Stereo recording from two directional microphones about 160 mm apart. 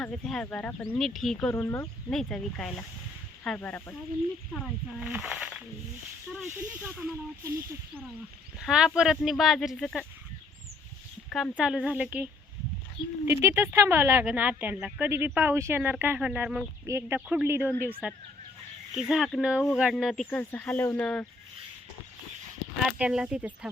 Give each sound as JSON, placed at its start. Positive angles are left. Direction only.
{"t": 0.0, "sound": "speech", "side_deg": 5}
{"t": 2.0, "sound": "speech", "side_deg": 5}
{"t": 4.5, "sound": "speech", "side_deg": 0}
{"t": 8.6, "sound": "speech", "side_deg": -5}
{"t": 11.3, "sound": "speech", "side_deg": 5}
{"t": 16.8, "sound": "speech", "side_deg": -15}
{"t": 17.2, "sound": "speech", "side_deg": -5}
{"t": 22.8, "sound": "speech", "side_deg": -5}